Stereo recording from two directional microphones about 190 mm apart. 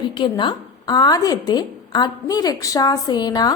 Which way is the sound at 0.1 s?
25° left (ahead or behind).